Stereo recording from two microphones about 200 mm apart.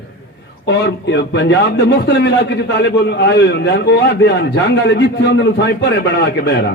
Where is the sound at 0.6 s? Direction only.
60° left (ahead or behind).